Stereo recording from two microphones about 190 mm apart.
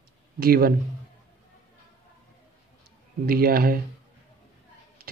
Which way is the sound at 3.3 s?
50° right (ahead or behind).